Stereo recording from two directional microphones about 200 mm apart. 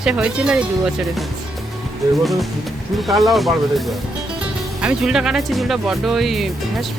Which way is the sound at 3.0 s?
Centre (ahead or behind).